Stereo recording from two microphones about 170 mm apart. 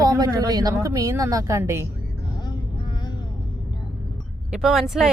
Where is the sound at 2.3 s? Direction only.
25° left (ahead or behind).